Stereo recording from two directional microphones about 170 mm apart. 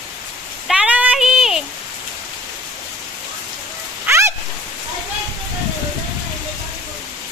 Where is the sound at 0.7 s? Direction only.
5° right (ahead or behind).